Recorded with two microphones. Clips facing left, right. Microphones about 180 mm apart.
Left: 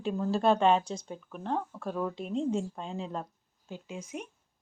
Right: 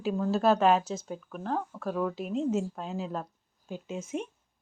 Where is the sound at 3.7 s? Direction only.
25° right (ahead or behind).